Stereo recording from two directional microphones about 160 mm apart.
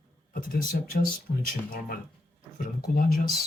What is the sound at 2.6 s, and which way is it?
Speech, 60° left (ahead or behind).